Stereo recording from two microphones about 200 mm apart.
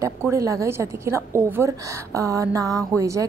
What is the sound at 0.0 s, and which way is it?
A woman's voice, 15° right (ahead or behind).